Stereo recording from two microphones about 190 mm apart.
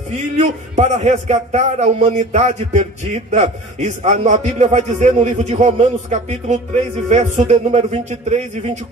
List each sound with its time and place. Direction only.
0.1 s a man's voice: 35° right (ahead or behind)